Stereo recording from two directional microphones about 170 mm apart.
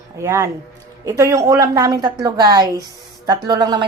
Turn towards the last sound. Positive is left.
turn(degrees=-25)  # may be behind; listen again after turning